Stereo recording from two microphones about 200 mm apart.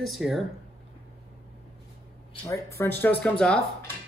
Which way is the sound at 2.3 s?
15° left (ahead or behind).